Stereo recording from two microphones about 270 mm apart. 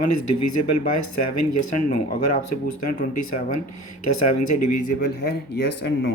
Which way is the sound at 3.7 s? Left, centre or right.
Left.